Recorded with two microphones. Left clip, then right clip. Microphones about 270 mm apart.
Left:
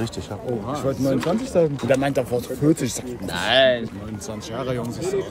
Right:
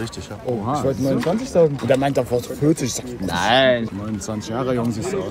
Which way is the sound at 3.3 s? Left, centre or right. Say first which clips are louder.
Right 2 dB; centre.